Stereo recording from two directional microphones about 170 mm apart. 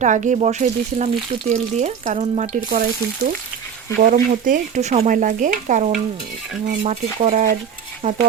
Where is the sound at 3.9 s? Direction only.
55° right (ahead or behind).